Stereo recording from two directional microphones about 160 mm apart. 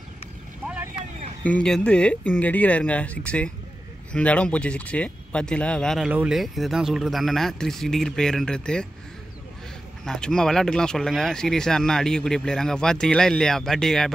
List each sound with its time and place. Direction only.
0.7 s boat: 5° right (ahead or behind)
1.4 s speech: 10° left (ahead or behind)
10.0 s speech: 5° left (ahead or behind)